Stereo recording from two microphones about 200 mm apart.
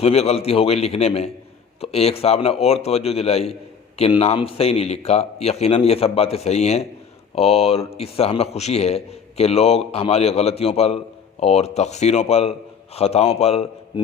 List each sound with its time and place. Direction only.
0.0 s a man's voice: 30° left (ahead or behind)